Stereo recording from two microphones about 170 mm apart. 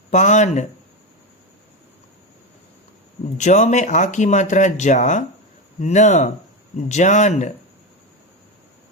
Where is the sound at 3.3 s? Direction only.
45° left (ahead or behind).